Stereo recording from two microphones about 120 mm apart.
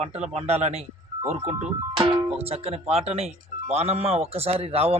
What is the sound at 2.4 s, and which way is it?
Speech, 60° right (ahead or behind).